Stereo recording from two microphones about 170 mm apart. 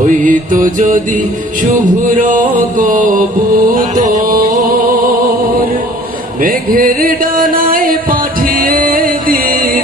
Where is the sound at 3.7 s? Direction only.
55° right (ahead or behind).